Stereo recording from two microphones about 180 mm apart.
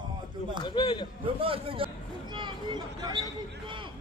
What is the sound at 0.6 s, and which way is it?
Speech, 25° left (ahead or behind).